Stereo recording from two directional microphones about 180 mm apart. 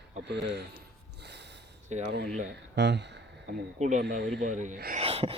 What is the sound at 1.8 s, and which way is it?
Speech, 40° right (ahead or behind).